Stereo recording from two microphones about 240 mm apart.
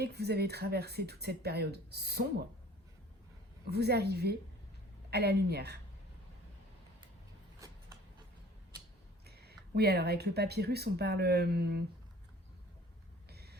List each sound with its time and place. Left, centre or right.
0.0 s speech: right
3.7 s speech: right
9.2 s speech: right
13.2 s vehicle: right